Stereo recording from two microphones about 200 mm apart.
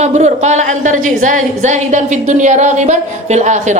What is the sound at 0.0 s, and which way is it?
A woman's voice, 35° right (ahead or behind).